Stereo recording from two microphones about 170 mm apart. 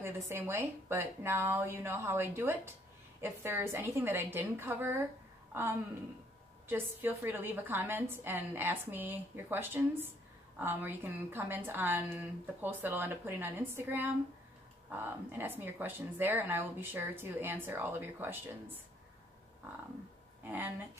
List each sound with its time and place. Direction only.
0.0 s a woman's voice: 15° right (ahead or behind)